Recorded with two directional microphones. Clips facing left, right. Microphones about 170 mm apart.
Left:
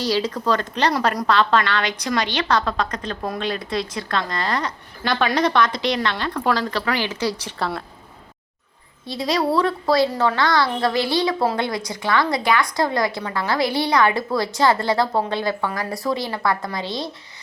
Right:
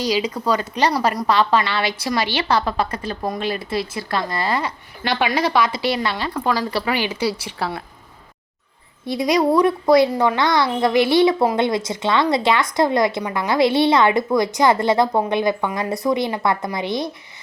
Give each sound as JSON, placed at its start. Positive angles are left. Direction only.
{"t": 0.0, "sound": "a woman's voice", "side_deg": -10}
{"t": 9.0, "sound": "a woman's voice", "side_deg": -20}